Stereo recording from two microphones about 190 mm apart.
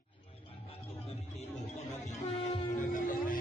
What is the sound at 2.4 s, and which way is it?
Music, 40° left (ahead or behind).